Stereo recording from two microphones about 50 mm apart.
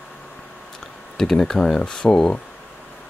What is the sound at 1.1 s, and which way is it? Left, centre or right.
Speech, centre.